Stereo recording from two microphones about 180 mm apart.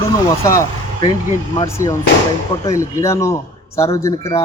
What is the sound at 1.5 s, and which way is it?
Speech, 15° left (ahead or behind).